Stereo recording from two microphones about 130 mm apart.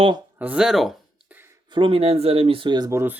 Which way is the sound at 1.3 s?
15° right (ahead or behind).